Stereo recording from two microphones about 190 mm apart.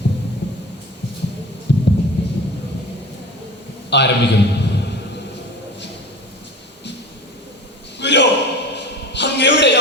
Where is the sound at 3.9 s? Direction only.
65° left (ahead or behind).